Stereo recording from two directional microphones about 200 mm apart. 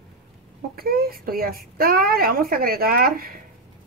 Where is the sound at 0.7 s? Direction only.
50° right (ahead or behind).